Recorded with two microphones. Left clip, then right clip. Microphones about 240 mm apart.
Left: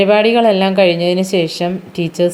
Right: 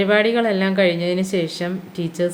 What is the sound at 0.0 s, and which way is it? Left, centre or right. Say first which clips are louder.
A woman's voice: left 7 dB; centre.